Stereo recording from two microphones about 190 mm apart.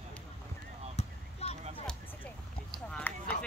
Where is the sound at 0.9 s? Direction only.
35° left (ahead or behind).